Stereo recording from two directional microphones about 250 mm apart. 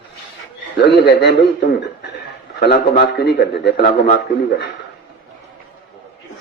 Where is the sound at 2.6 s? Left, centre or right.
Left.